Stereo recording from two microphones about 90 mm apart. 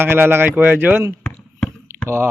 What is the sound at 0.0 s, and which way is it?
Speech, 25° right (ahead or behind).